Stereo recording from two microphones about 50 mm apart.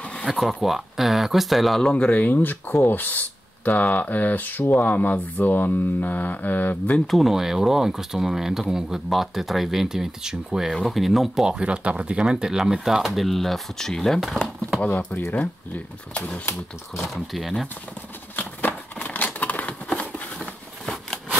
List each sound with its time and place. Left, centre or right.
0.3 s speech: centre
1.8 s speech: centre
2.1 s speech: left
7.1 s speech: centre
10.7 s speech: centre
11.4 s speech: centre
12.2 s speech: centre
15.0 s speech: left
17.0 s speech: centre
18.3 s a sound: left
20.8 s a sound: centre